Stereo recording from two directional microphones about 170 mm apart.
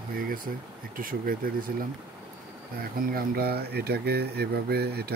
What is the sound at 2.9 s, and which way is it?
Speech, 60° right (ahead or behind).